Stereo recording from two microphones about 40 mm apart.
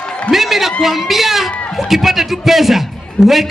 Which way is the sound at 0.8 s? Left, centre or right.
Centre.